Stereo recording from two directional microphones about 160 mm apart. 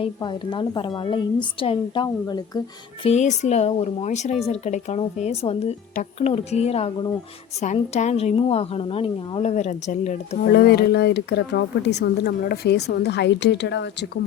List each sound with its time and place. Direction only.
0.0 s a woman's voice: 30° left (ahead or behind)
3.0 s a woman's voice: 45° left (ahead or behind)
10.4 s speech: 75° left (ahead or behind)